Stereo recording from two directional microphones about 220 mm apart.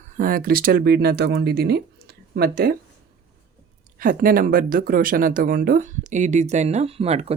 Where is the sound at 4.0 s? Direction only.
40° right (ahead or behind).